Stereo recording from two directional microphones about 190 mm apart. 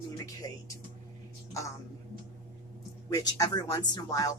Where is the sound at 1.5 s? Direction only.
15° left (ahead or behind).